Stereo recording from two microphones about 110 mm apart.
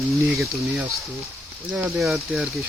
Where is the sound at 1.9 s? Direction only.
Centre (ahead or behind).